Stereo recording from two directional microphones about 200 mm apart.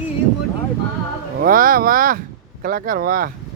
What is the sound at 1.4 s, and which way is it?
Speech, 45° right (ahead or behind).